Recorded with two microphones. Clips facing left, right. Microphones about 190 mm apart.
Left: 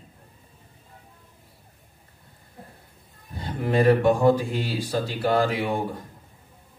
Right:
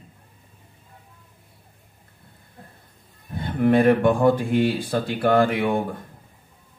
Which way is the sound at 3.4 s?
55° right (ahead or behind).